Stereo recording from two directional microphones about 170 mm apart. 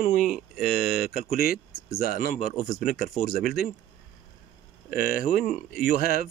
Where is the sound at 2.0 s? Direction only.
55° left (ahead or behind).